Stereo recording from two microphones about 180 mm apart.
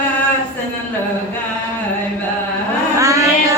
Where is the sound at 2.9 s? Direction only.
15° right (ahead or behind).